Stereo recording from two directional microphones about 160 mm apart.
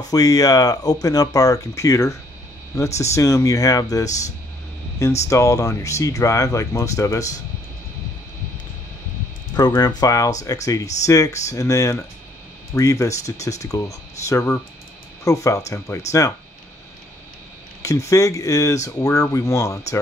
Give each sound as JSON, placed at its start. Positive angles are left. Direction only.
{"t": 0.1, "sound": "speech", "side_deg": 20}
{"t": 5.3, "sound": "speech", "side_deg": 20}
{"t": 9.6, "sound": "speech", "side_deg": 25}
{"t": 17.8, "sound": "speech", "side_deg": 20}